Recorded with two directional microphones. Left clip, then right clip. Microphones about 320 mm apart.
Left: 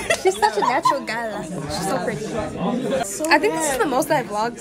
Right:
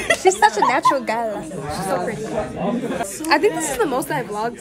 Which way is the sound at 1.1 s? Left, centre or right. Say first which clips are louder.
Right 4 dB; centre.